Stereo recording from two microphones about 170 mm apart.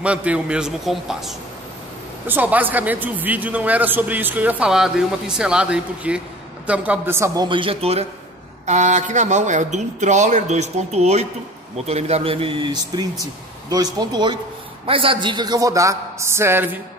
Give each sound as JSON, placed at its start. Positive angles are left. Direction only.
{"t": 0.0, "sound": "a man's voice", "side_deg": -5}
{"t": 7.4, "sound": "a man's voice", "side_deg": -30}